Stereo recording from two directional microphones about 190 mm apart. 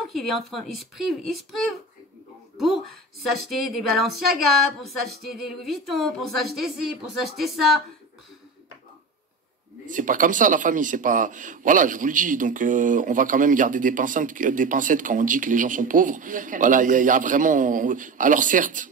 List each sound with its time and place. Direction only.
0.1 s a woman's voice: centre (ahead or behind)
2.5 s a sound: centre (ahead or behind)
3.3 s a woman's voice: centre (ahead or behind)
9.8 s speech: 45° right (ahead or behind)